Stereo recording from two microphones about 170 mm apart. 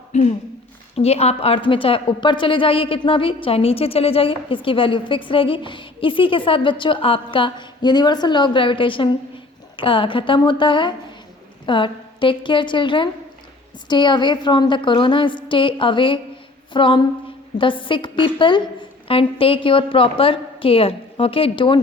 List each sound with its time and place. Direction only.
0.1 s a woman's voice: 40° left (ahead or behind)